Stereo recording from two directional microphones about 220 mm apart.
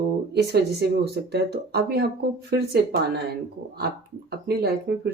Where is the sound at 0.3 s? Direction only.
50° right (ahead or behind).